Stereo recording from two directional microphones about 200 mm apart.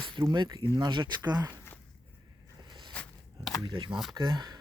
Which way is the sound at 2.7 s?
20° right (ahead or behind).